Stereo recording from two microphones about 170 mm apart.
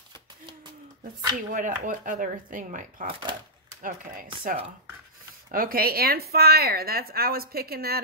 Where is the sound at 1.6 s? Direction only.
50° right (ahead or behind).